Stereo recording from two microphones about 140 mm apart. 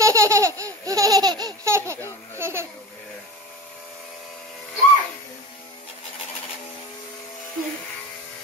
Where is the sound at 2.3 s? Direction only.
20° right (ahead or behind).